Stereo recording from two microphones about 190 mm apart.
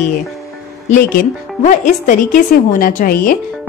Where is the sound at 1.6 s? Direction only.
40° left (ahead or behind).